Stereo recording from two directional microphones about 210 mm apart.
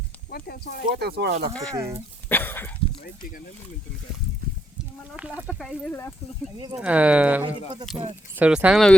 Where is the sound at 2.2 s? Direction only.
10° left (ahead or behind).